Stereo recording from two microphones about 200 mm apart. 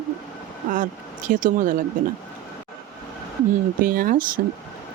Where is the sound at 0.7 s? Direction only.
40° right (ahead or behind).